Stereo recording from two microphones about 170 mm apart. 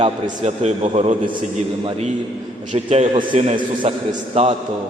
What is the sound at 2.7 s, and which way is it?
A man's voice, 45° right (ahead or behind).